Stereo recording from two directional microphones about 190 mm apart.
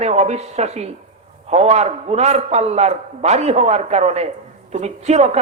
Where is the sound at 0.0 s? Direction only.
35° right (ahead or behind).